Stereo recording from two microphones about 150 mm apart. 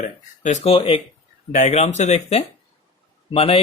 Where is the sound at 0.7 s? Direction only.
40° left (ahead or behind).